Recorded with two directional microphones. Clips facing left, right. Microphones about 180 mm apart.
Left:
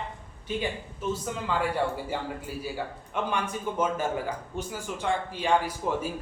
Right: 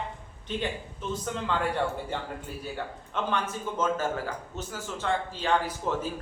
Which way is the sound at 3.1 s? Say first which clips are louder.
Even; 15° left (ahead or behind).